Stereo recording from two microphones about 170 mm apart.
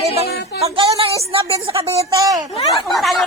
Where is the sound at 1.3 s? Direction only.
30° right (ahead or behind).